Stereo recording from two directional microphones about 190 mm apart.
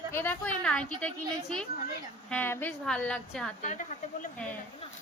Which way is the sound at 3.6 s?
40° left (ahead or behind).